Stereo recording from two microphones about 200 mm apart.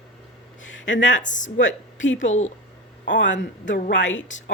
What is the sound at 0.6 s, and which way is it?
A man's voice, 70° left (ahead or behind).